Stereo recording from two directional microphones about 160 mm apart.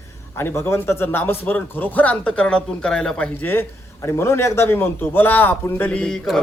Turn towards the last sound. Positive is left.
turn(degrees=5)  # may be behind; listen again after turning